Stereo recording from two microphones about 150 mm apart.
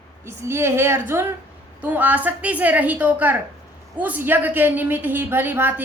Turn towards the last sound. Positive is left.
turn(degrees=-10)  # may be behind; listen again after turning